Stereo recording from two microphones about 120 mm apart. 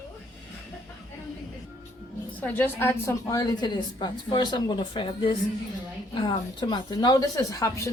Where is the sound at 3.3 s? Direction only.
35° left (ahead or behind).